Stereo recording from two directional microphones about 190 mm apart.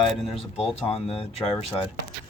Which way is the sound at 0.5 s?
30° left (ahead or behind).